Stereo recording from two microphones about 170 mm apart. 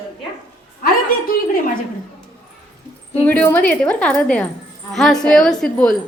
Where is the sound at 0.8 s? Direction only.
60° left (ahead or behind).